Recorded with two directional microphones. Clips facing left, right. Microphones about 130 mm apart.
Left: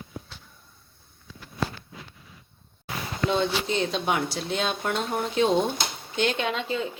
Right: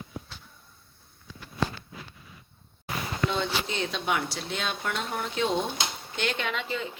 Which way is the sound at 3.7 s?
35° left (ahead or behind).